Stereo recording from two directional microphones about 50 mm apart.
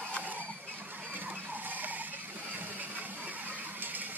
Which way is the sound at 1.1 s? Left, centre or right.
Right.